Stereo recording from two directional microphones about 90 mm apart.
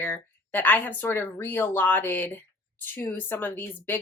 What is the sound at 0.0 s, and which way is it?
Speech, 20° left (ahead or behind).